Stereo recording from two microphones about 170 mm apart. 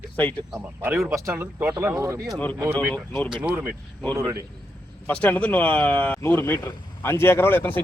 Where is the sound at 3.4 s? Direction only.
10° right (ahead or behind).